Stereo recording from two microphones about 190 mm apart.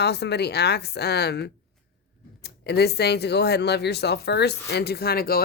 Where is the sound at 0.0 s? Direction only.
60° left (ahead or behind).